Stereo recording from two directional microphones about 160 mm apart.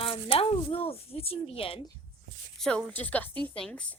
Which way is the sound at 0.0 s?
35° left (ahead or behind).